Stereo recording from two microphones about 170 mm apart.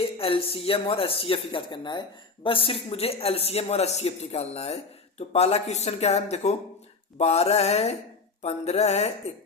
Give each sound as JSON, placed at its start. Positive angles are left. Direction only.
{"t": 0.0, "sound": "speech", "side_deg": 35}